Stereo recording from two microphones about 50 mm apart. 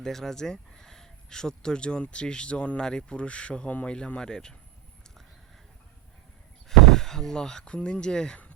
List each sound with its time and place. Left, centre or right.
0.0 s speech: centre
6.7 s speech: centre